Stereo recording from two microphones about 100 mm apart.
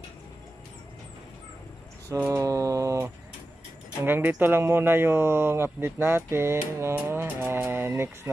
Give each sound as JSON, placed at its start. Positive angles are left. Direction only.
{"t": 2.1, "sound": "mantra", "side_deg": -35}
{"t": 4.0, "sound": "speech", "side_deg": -20}